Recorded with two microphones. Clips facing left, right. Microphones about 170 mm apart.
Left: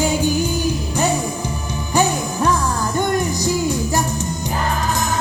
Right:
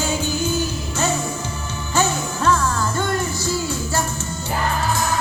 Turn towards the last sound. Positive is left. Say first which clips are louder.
# left 4 dB
turn(degrees=15)  # may be behind; listen again after turning